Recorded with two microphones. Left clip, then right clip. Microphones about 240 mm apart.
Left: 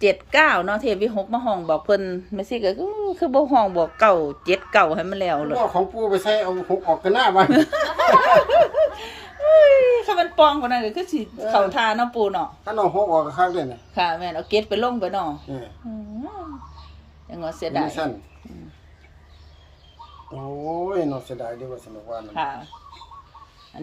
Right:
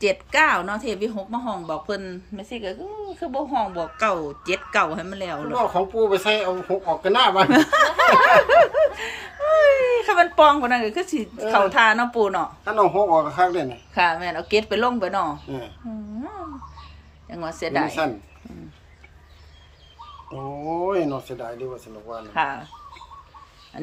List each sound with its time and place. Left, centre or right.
0.0 s speech: centre; by 3.8 s left
3.9 s speech: centre
5.7 s speech: centre
17.2 s a woman's voice: centre
20.9 s speech: centre
22.4 s speech: centre
23.7 s speech: right